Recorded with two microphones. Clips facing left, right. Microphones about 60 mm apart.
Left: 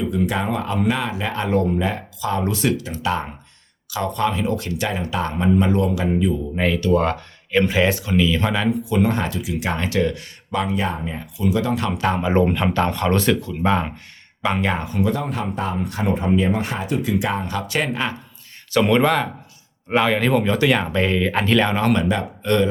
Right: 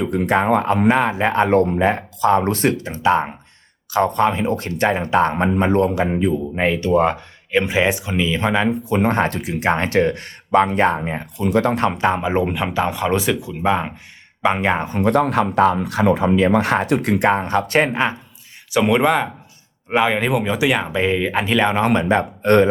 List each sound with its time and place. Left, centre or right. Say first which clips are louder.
0.0 s speech: right 4 dB; right
8.8 s speech: right 2 dB; right
12.2 s speech: left 1 dB; centre
14.4 s speech: right 4 dB; right
15.0 s speech: right 9 dB; right
18.7 s speech: right 1 dB; centre
22.1 s speech: right 6 dB; right